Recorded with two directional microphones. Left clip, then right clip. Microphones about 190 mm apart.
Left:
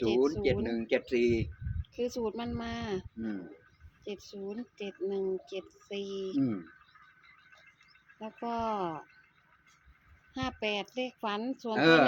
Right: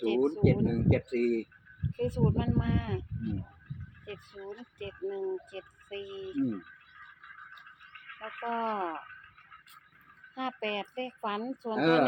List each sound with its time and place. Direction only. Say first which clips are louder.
0.0 s speech: even; 15° left (ahead or behind)
4.0 s speech: left 3 dB; 15° left (ahead or behind)
8.4 s speech: right 1 dB; 15° left (ahead or behind)
10.3 s speech: even; 15° left (ahead or behind)